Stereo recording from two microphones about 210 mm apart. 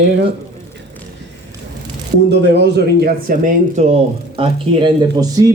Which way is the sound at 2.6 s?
50° right (ahead or behind).